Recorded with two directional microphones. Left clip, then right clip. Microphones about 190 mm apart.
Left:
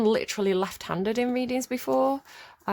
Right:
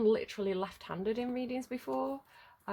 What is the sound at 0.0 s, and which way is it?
Speech, 45° left (ahead or behind).